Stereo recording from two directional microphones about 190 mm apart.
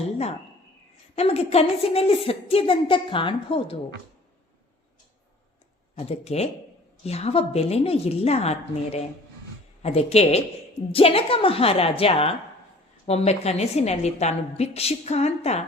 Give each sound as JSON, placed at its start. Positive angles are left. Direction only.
{"t": 1.1, "sound": "a woman's voice", "side_deg": 35}
{"t": 6.1, "sound": "a woman's voice", "side_deg": 35}